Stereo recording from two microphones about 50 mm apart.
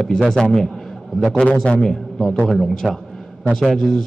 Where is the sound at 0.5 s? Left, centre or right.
Centre.